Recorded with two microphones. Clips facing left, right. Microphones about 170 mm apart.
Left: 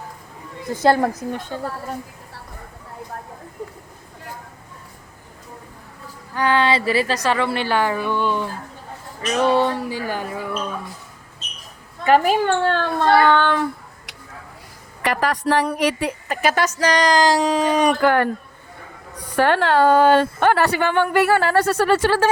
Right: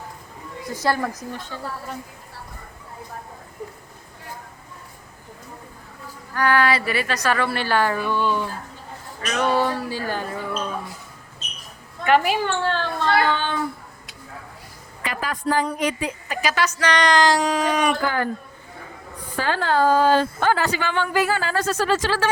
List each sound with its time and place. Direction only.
1.1 s a woman's voice: 55° left (ahead or behind)
6.3 s a woman's voice: 20° left (ahead or behind)
12.0 s a woman's voice: 40° left (ahead or behind); by 13.7 s 65° left (ahead or behind)
15.0 s a woman's voice: 70° left (ahead or behind); by 17.9 s 30° left (ahead or behind)
18.0 s a woman's voice: 65° left (ahead or behind)